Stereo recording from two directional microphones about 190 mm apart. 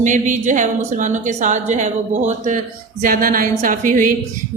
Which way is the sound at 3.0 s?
45° right (ahead or behind).